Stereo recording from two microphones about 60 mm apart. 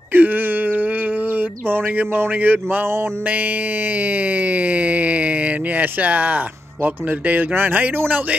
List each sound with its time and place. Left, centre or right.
0.1 s wail: right
1.3 s a sound: right
4.0 s speech: right